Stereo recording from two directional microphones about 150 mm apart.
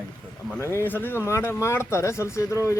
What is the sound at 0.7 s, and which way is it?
A man's voice, 15° left (ahead or behind).